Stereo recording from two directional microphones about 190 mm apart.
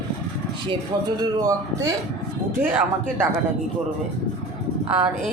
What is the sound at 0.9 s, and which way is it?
A man's voice, 20° right (ahead or behind).